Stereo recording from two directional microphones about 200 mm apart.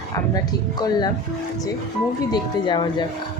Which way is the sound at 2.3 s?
20° left (ahead or behind).